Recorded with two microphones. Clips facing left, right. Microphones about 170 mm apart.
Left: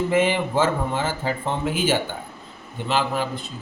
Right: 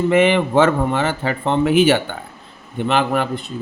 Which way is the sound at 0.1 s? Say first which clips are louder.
Right 6 dB; 70° right (ahead or behind).